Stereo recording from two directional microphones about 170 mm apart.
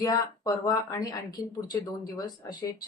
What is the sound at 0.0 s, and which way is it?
Speech, 20° left (ahead or behind).